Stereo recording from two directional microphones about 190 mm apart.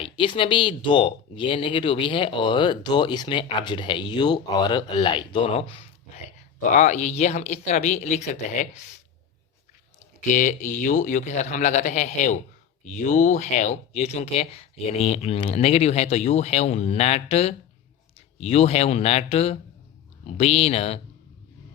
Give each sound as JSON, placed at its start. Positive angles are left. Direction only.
{"t": 0.0, "sound": "speech", "side_deg": 25}
{"t": 6.6, "sound": "speech", "side_deg": 40}
{"t": 10.3, "sound": "speech", "side_deg": 40}